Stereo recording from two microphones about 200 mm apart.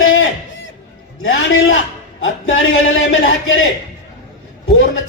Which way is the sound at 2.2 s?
75° left (ahead or behind).